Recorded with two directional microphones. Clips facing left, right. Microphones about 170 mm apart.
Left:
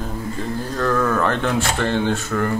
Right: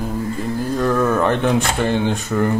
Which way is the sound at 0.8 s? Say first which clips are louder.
Right 2 dB; 15° right (ahead or behind).